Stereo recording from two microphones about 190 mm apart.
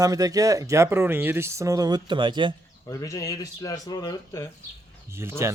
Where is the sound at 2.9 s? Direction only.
15° left (ahead or behind).